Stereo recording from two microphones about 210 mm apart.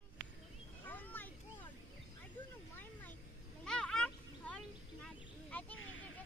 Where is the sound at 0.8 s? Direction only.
10° left (ahead or behind).